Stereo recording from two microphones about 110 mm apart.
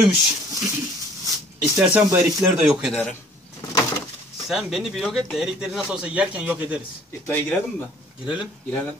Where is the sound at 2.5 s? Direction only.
5° right (ahead or behind).